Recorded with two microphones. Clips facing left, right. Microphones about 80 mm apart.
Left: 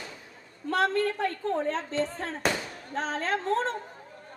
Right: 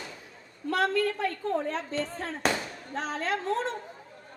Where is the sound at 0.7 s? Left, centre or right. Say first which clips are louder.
Left 1 dB; left.